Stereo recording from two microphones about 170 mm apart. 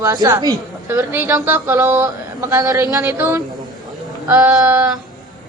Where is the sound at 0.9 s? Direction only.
10° right (ahead or behind).